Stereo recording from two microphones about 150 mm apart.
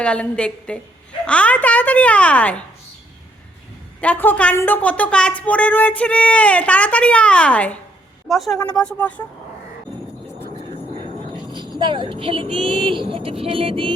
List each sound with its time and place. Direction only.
0.0 s a woman's voice: 5° left (ahead or behind)
4.0 s a woman's voice: 10° left (ahead or behind)
11.8 s speech: 30° right (ahead or behind)